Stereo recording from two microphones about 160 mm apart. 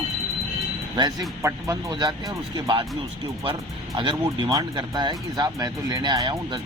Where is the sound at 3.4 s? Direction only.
30° right (ahead or behind).